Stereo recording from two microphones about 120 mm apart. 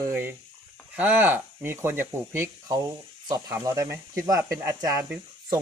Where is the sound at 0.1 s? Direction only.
15° right (ahead or behind).